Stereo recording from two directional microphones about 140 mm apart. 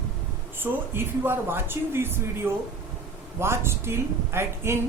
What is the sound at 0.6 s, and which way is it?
Speech, 15° right (ahead or behind).